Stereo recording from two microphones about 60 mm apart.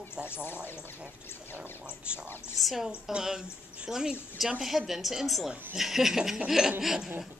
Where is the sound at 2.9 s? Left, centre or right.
Centre.